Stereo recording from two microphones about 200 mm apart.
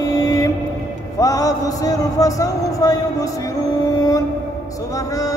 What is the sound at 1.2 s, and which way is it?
Speech, 15° left (ahead or behind).